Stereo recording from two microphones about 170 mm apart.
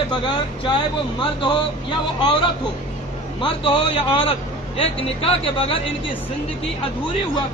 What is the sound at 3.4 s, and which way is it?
A man's voice, 30° left (ahead or behind).